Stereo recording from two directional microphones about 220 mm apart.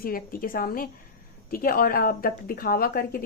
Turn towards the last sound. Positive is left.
turn(degrees=40)  # may be behind; listen again after turning